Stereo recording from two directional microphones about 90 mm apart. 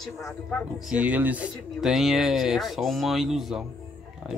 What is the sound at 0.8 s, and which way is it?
Speech, 15° right (ahead or behind).